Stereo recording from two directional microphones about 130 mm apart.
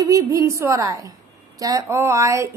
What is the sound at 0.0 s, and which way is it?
Speech, 25° right (ahead or behind).